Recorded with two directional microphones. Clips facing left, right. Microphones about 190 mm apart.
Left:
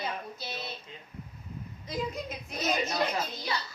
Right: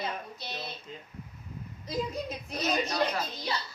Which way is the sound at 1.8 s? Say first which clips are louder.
Right 2 dB; 35° right (ahead or behind).